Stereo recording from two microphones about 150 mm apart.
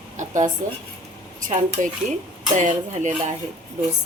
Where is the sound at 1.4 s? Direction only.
55° right (ahead or behind).